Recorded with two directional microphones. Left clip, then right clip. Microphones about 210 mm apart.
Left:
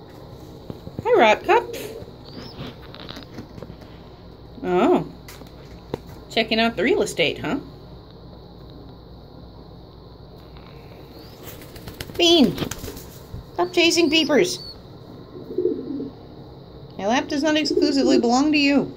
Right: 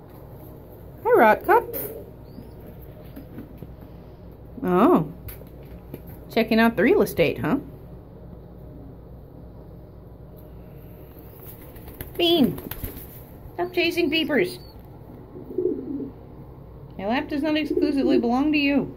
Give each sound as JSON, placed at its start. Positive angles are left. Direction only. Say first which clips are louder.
{"t": 1.0, "sound": "speech", "louder": "left 1 dB", "side_deg": -15}
{"t": 4.6, "sound": "speech", "louder": "even", "side_deg": -20}
{"t": 6.3, "sound": "speech", "louder": "even", "side_deg": -25}
{"t": 12.2, "sound": "a child's voice", "louder": "left 4 dB", "side_deg": 5}
{"t": 13.6, "sound": "a woman's voice", "louder": "left 5 dB", "side_deg": 10}
{"t": 16.9, "sound": "a sound", "louder": "left 4 dB", "side_deg": 0}
{"t": 17.7, "sound": "speech", "louder": "left 3 dB", "side_deg": 5}